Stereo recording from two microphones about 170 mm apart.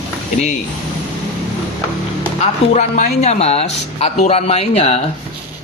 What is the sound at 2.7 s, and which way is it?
Speech, 40° left (ahead or behind).